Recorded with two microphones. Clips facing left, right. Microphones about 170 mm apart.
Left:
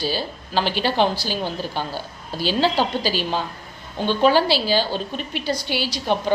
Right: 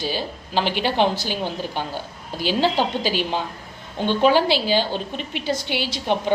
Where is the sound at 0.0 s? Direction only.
20° right (ahead or behind).